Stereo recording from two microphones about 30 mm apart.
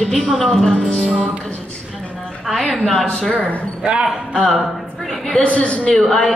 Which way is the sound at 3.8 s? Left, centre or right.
Right.